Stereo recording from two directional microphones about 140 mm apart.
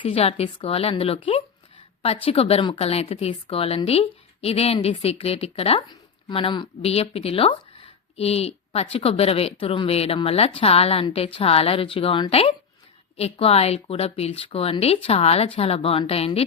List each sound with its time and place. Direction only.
0.0 s speech: 45° left (ahead or behind)